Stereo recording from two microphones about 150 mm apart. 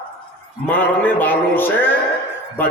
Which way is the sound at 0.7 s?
10° left (ahead or behind).